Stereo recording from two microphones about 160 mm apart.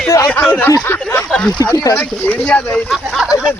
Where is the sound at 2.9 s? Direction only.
5° right (ahead or behind).